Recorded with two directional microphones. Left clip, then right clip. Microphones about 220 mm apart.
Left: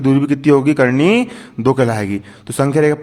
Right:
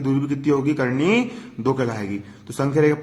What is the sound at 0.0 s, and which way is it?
A man's voice, 40° left (ahead or behind).